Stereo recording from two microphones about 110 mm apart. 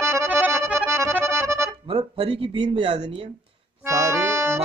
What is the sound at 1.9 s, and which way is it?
Speech, 45° right (ahead or behind).